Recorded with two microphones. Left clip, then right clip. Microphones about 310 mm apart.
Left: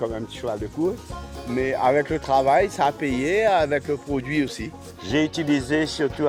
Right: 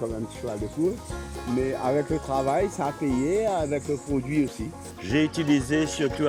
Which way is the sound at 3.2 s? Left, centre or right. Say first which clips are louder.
Left 6 dB; left.